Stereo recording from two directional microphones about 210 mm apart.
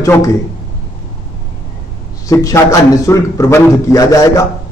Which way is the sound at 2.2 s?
15° left (ahead or behind).